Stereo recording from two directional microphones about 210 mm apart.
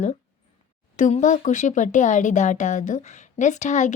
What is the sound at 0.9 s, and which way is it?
Speech, 35° left (ahead or behind).